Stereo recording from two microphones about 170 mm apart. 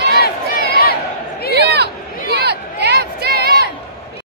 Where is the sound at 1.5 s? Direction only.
75° right (ahead or behind).